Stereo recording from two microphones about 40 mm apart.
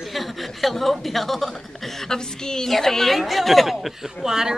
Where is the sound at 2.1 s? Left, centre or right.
Centre.